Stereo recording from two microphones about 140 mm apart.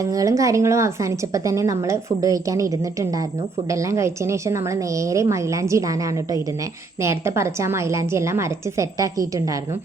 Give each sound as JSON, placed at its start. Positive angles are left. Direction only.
{"t": 0.0, "sound": "a woman's voice", "side_deg": -25}
{"t": 7.0, "sound": "a woman's voice", "side_deg": -20}